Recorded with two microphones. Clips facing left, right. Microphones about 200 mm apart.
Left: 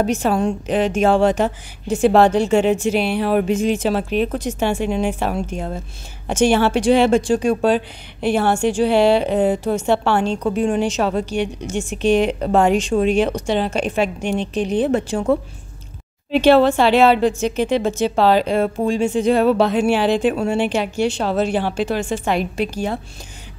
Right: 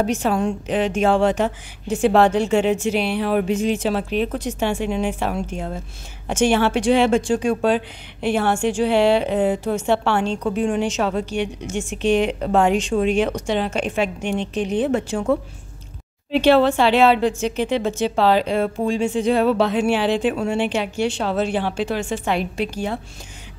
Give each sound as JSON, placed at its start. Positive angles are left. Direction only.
{"t": 0.0, "sound": "speech", "side_deg": 45}